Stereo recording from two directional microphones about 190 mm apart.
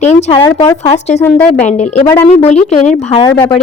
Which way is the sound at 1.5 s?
40° left (ahead or behind).